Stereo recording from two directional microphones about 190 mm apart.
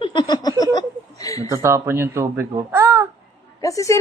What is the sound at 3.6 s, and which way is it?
Speech, 15° left (ahead or behind).